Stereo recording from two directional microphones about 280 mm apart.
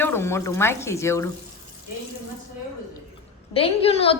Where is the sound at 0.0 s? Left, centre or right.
Centre.